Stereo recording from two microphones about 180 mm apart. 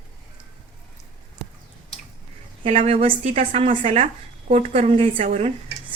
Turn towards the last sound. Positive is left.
turn(degrees=-35)  # may be behind; listen again after turning